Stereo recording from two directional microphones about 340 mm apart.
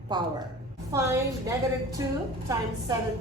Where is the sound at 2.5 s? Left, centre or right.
Centre.